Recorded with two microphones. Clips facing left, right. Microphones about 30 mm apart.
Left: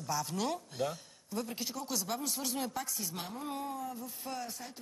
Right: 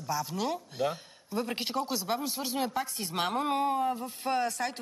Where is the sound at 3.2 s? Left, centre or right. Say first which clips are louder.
Right 12 dB; right.